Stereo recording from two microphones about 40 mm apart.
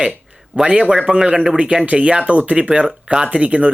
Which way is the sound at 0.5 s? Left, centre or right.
Right.